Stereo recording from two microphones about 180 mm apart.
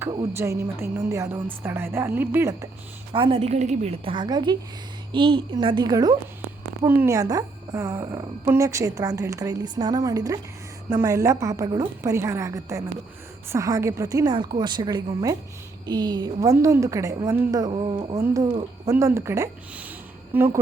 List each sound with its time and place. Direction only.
0.3 s a woman's voice: 15° right (ahead or behind)
3.1 s a woman's voice: 30° right (ahead or behind)
17.6 s a woman's voice: 30° right (ahead or behind)
18.9 s a woman's voice: 15° right (ahead or behind)